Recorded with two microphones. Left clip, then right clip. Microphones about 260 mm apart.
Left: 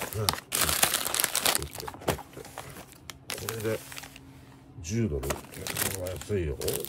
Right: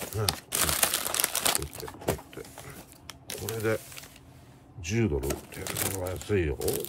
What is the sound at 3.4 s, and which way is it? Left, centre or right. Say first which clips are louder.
Speech: right 3 dB; centre.